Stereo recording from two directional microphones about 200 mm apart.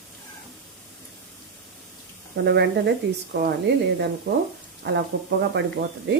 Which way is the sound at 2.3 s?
60° right (ahead or behind).